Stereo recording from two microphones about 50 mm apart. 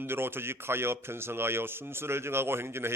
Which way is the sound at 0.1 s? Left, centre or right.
Right.